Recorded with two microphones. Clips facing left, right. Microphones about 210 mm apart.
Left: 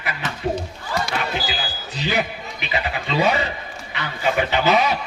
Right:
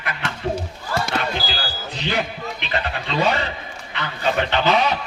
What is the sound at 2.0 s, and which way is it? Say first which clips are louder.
A man's voice: left 1 dB; 5° left (ahead or behind).